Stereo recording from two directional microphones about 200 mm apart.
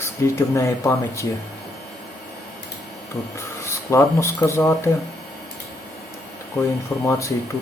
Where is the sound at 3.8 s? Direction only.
15° left (ahead or behind).